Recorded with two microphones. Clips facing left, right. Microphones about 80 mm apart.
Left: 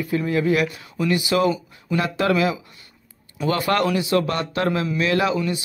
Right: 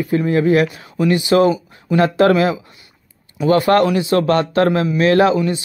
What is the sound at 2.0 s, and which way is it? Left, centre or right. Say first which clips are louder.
Speech: right 7 dB; right.